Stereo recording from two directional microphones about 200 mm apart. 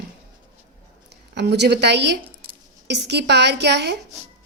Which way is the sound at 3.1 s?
55° right (ahead or behind).